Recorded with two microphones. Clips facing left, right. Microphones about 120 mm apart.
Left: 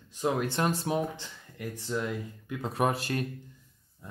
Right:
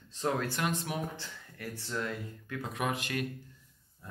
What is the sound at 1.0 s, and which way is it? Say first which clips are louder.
Speech: left 6 dB; 20° left (ahead or behind).